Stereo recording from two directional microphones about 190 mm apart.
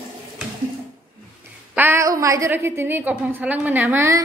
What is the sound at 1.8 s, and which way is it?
A woman's voice, 15° right (ahead or behind).